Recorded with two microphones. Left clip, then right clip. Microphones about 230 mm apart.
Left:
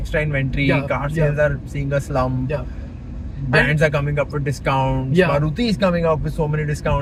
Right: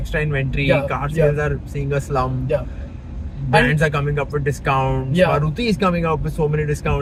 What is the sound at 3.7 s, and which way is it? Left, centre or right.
Speech, centre.